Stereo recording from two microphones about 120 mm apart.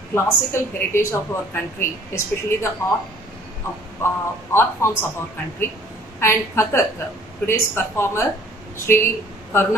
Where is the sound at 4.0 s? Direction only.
20° left (ahead or behind).